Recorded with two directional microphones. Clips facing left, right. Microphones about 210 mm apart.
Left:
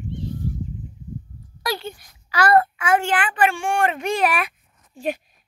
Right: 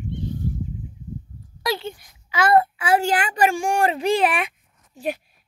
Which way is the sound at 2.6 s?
30° right (ahead or behind).